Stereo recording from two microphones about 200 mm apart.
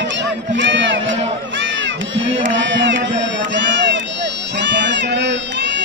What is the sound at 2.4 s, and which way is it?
Run, 65° right (ahead or behind).